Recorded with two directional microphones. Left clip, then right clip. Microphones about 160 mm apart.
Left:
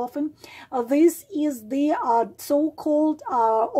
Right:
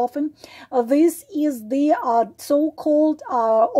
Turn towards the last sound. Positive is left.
turn(degrees=-35)  # may be behind; listen again after turning